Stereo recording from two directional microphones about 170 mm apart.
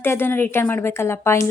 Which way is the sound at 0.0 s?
15° left (ahead or behind).